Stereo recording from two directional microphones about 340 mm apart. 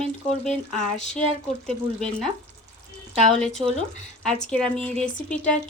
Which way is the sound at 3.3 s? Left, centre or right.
Centre.